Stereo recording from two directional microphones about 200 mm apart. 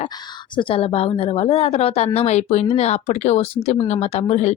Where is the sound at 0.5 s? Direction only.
25° left (ahead or behind).